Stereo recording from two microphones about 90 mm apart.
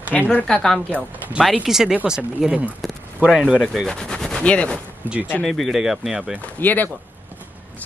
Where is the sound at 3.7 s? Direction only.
5° left (ahead or behind).